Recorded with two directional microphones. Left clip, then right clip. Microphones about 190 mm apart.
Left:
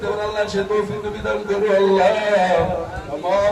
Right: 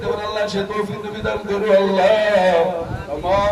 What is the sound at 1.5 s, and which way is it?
A man's voice, 35° right (ahead or behind).